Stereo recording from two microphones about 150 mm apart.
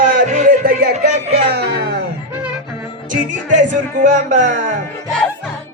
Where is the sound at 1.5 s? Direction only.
90° right.